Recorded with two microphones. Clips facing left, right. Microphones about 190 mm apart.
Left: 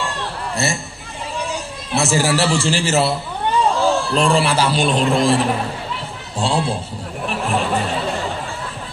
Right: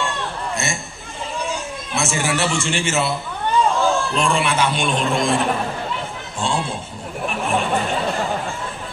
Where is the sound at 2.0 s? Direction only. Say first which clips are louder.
Left 4 dB; 35° left (ahead or behind).